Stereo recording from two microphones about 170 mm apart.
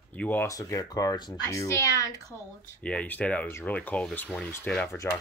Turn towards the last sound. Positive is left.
turn(degrees=10)  # may be behind; listen again after turning